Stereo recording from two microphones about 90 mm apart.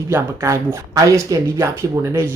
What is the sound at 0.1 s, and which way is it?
Speech, 35° right (ahead or behind).